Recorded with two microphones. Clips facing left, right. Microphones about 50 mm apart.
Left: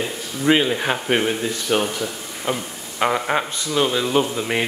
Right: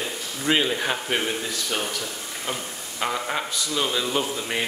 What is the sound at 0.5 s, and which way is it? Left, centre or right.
Speech, centre.